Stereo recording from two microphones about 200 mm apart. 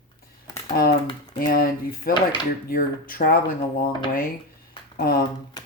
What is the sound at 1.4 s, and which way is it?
Speech, 50° left (ahead or behind).